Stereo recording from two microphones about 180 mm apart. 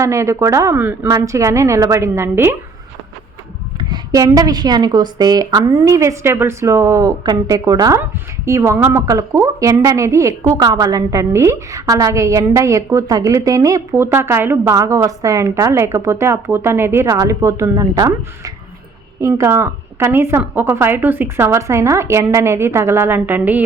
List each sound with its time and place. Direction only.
0.0 s a woman's voice: 15° right (ahead or behind)
3.8 s a woman's voice: 25° right (ahead or behind)